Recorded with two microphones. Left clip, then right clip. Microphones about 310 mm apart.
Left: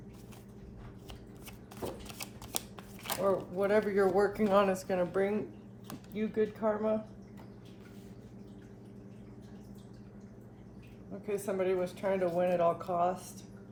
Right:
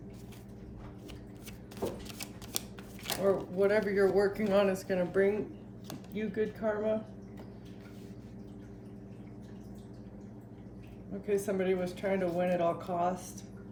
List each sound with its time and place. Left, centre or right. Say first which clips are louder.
2.0 s speech: right 1 dB; centre
11.3 s speech: right 1 dB; centre